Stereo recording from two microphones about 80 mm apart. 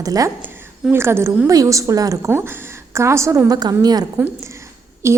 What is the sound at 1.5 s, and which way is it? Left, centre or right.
A woman's voice, right.